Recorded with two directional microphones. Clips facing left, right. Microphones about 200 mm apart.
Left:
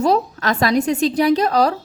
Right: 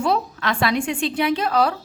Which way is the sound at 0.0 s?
40° left (ahead or behind).